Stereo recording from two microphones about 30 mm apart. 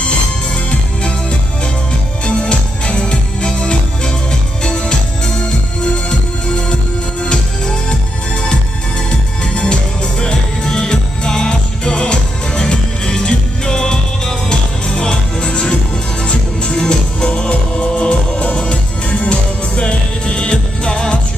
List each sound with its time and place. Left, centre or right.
2.5 s music: left
3.6 s music: left
17.5 s music: left